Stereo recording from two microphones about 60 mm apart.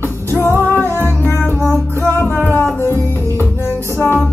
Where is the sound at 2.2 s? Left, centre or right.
Left.